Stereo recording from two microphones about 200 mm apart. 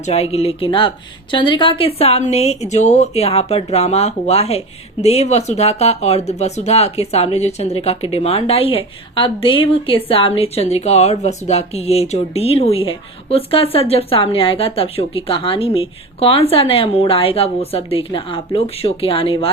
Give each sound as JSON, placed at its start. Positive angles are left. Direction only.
{"t": 0.0, "sound": "speech", "side_deg": 30}